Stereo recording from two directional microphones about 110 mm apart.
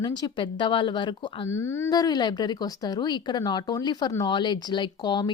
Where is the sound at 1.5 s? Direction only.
25° left (ahead or behind).